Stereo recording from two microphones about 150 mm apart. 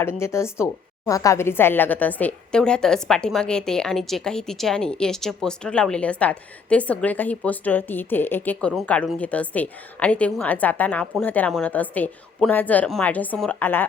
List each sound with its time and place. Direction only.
0.0 s a woman's voice: 15° left (ahead or behind)